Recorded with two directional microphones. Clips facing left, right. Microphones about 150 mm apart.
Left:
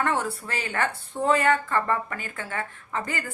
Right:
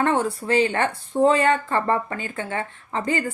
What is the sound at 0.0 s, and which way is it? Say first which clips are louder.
Speech: right 5 dB; 25° right (ahead or behind).